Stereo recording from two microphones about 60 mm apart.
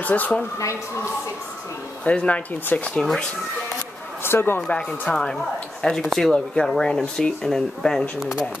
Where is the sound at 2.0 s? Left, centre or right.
Left.